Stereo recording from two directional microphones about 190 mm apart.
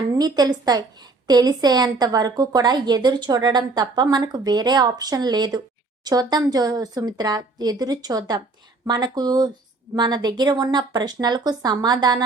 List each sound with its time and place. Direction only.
0.1 s a woman's voice: 20° right (ahead or behind)